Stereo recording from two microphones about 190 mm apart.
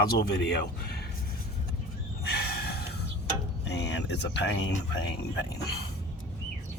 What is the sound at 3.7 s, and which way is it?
Speech, 65° left (ahead or behind).